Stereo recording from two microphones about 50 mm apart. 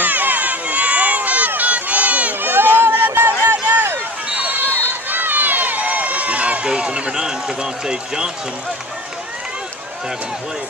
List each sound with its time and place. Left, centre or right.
0.0 s run: right
2.5 s a sound: right
4.3 s run: right; by 8.3 s centre